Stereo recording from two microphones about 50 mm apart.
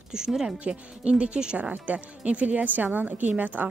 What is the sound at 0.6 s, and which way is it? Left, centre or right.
Speech, right.